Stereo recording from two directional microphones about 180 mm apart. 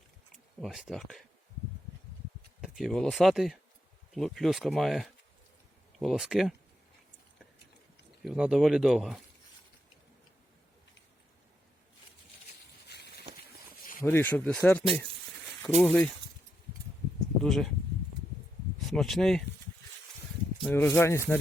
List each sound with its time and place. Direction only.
0.6 s speech: centre (ahead or behind)
2.6 s speech: centre (ahead or behind)
8.2 s speech: 5° right (ahead or behind)
12.9 s a sound: 65° left (ahead or behind)
14.0 s speech: 10° left (ahead or behind)
17.4 s speech: centre (ahead or behind)
18.9 s speech: centre (ahead or behind)
20.6 s speech: 10° left (ahead or behind)